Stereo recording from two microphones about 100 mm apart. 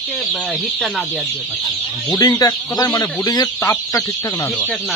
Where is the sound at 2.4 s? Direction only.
35° left (ahead or behind).